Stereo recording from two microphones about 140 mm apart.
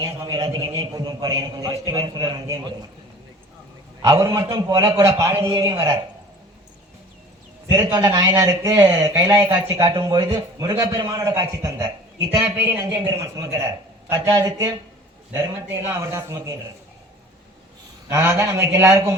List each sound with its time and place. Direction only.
0.0 s speech: 30° right (ahead or behind)
4.0 s speech: 25° right (ahead or behind)
5.5 s speech: 30° right (ahead or behind)
7.9 s a man's voice: 25° right (ahead or behind)
18.1 s speech: 15° right (ahead or behind)